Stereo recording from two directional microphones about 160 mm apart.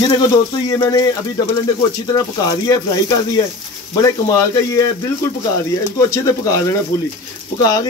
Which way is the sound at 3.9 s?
20° left (ahead or behind).